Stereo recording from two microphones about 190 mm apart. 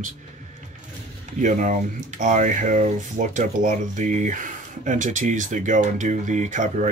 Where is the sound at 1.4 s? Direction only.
40° right (ahead or behind).